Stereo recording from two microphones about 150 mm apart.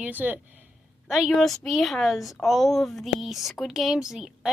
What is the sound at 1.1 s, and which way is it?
A woman's voice, centre (ahead or behind).